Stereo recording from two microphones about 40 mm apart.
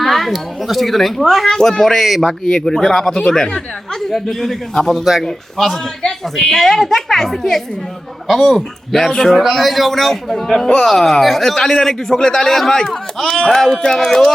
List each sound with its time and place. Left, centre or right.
0.0 s a child's voice: centre
2.2 s a man's voice: centre
3.2 s a man's voice: left
4.1 s a man's voice: centre
4.9 s a child's voice: centre